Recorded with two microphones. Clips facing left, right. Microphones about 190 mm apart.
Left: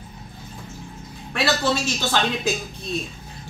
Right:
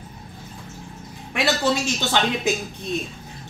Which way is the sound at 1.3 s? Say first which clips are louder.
Right 1 dB; 15° right (ahead or behind).